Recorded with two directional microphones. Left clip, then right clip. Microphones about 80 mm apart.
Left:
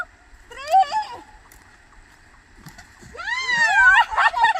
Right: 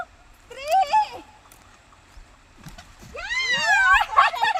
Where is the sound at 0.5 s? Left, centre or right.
Centre.